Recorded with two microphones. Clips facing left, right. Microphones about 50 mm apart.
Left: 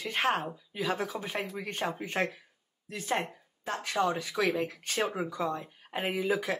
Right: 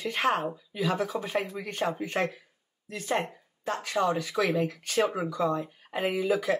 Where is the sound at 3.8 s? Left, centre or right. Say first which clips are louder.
Right 1 dB; left.